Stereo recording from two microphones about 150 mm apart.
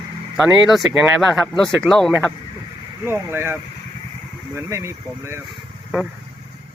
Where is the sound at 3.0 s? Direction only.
15° right (ahead or behind).